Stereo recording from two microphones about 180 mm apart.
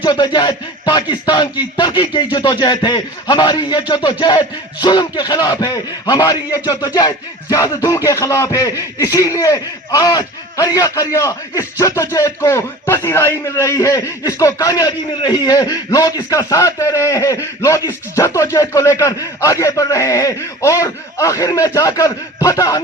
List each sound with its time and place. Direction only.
0.0 s a man's voice: 25° left (ahead or behind)